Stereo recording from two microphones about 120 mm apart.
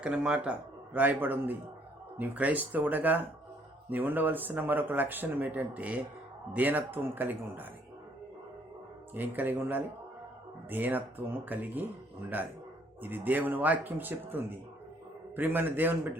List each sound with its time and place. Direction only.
0.0 s speech: 10° right (ahead or behind)
9.1 s speech: 15° right (ahead or behind)